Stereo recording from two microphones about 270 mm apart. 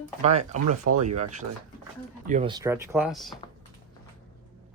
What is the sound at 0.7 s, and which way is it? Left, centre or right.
Speech, right.